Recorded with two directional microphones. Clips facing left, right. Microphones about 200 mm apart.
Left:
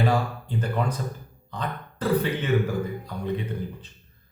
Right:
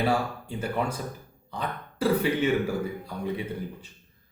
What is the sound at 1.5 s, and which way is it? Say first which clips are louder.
Burping: left 1 dB; 10° right (ahead or behind).